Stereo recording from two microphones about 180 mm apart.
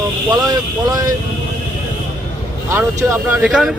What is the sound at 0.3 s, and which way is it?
Speech, 20° right (ahead or behind).